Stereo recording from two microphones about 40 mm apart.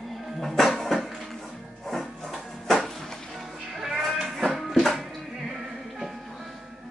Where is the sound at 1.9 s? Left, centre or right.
Centre.